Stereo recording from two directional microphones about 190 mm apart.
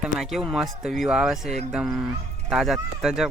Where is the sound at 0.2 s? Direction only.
Centre (ahead or behind).